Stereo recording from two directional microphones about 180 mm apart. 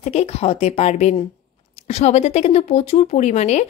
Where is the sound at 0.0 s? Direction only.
40° left (ahead or behind).